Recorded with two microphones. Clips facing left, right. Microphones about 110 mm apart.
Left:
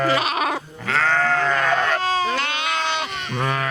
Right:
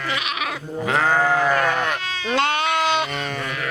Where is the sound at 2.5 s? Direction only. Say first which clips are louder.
Right 4 dB; 50° right (ahead or behind).